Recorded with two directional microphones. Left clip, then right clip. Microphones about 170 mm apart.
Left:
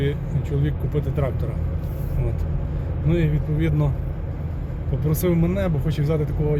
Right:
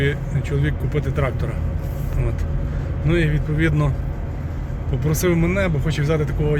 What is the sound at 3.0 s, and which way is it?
Speech, 15° left (ahead or behind).